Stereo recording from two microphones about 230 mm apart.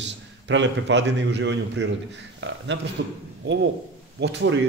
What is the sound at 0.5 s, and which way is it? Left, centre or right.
A man's voice, right.